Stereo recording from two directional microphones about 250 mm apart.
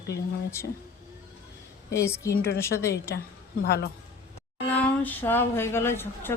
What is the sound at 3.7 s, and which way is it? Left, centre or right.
Speech, left.